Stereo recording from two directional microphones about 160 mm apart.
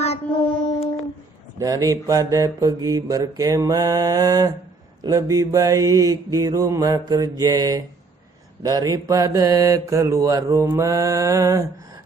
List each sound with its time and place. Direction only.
0.0 s child singing: 35° left (ahead or behind)
1.6 s mantra: 20° right (ahead or behind)